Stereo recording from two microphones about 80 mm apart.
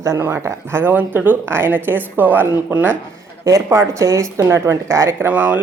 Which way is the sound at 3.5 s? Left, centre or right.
Right.